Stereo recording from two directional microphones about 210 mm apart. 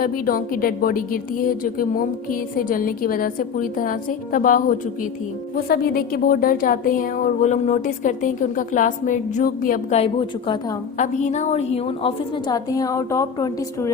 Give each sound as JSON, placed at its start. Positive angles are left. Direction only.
{"t": 0.0, "sound": "a woman's voice", "side_deg": 45}
{"t": 10.0, "sound": "a woman's voice", "side_deg": 25}
{"t": 10.9, "sound": "a woman's voice", "side_deg": 35}